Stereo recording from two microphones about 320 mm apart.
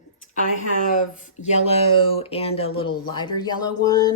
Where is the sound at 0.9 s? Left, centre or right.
Left.